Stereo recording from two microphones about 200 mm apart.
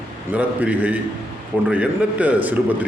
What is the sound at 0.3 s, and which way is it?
A man's voice, 5° right (ahead or behind).